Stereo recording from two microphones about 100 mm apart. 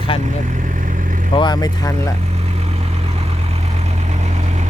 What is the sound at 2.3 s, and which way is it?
Vehicle, 90° right.